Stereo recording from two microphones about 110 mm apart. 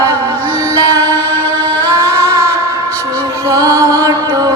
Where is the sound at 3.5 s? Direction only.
30° right (ahead or behind).